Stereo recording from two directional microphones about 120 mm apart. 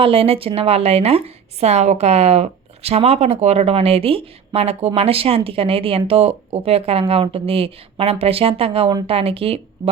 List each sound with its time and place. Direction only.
0.0 s a woman's voice: 50° right (ahead or behind)